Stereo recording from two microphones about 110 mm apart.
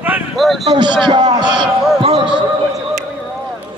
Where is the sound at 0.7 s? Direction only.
40° right (ahead or behind).